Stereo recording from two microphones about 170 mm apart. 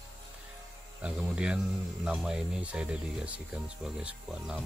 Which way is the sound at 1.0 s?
5° right (ahead or behind).